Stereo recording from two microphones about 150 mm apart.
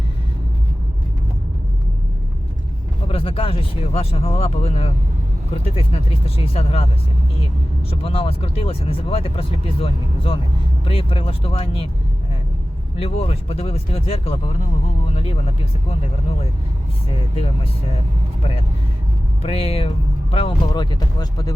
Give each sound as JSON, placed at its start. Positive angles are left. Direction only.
{"t": 3.1, "sound": "speech", "side_deg": 40}
{"t": 7.9, "sound": "speech", "side_deg": 40}
{"t": 13.0, "sound": "speech", "side_deg": 40}
{"t": 17.3, "sound": "speech", "side_deg": 40}
{"t": 19.4, "sound": "speech", "side_deg": 40}